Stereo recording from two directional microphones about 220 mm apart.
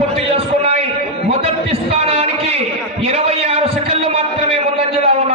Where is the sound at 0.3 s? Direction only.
30° right (ahead or behind).